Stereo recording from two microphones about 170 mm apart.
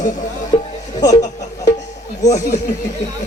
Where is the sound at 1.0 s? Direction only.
20° left (ahead or behind).